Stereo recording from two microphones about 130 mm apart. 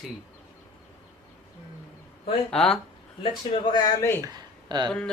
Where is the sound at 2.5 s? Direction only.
5° left (ahead or behind).